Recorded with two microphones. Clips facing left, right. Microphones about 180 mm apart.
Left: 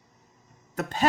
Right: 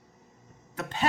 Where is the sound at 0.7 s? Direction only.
40° left (ahead or behind).